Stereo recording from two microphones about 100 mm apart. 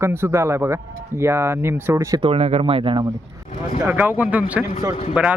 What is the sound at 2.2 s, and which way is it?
Speech, 75° right (ahead or behind).